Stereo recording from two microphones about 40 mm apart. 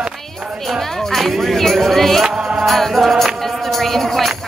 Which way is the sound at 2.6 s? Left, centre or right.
Centre.